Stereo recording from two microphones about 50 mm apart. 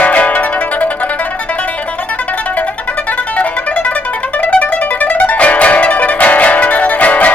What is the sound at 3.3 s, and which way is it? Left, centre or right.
Music, left.